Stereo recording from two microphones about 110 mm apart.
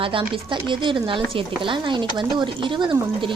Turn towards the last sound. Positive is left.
turn(degrees=-50)  # may be behind; listen again after turning